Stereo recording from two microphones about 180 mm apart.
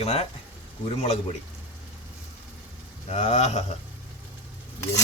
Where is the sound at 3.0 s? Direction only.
35° left (ahead or behind).